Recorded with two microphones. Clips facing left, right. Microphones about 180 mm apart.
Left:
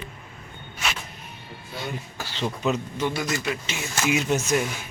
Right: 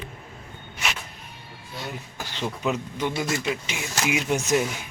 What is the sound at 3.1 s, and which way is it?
Speech, 25° right (ahead or behind).